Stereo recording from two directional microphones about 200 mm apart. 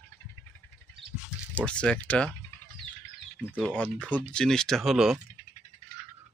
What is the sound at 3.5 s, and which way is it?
Speech, 5° right (ahead or behind).